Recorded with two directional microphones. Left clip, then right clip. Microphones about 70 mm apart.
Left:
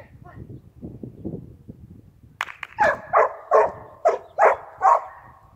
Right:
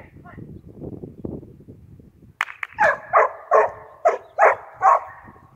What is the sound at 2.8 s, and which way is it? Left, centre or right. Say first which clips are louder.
Dog: right 1 dB; centre.